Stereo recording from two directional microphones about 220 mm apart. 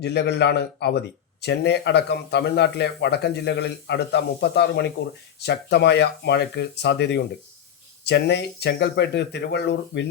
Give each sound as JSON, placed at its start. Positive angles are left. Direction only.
{"t": 0.0, "sound": "speech", "side_deg": 50}